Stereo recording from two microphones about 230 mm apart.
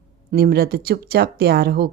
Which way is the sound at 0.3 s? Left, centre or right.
Right.